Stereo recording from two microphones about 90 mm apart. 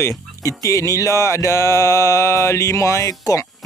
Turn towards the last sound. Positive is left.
turn(degrees=40)  # may be behind; listen again after turning